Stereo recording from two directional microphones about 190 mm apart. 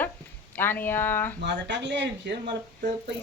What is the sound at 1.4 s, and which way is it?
Speech, 65° right (ahead or behind).